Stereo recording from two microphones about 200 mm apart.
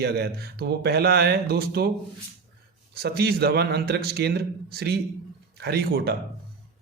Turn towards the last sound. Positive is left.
turn(degrees=-55)  # may be behind; listen again after turning